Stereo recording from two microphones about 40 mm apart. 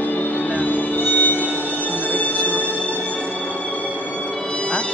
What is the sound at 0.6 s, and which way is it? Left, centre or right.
Music, left.